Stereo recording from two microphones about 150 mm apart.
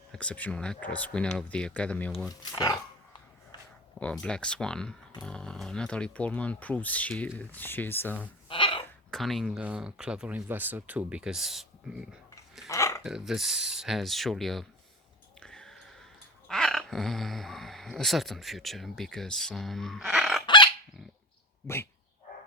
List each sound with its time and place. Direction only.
0.1 s speech: 10° left (ahead or behind)
2.3 s dog: 25° left (ahead or behind)
4.0 s speech: 5° left (ahead or behind)
8.4 s a sound: 35° left (ahead or behind)
9.0 s speech: centre (ahead or behind)
12.6 s a sound: 20° left (ahead or behind)
13.0 s speech: 5° right (ahead or behind)
15.4 s a sound: 5° left (ahead or behind)
16.5 s speech: 5° left (ahead or behind)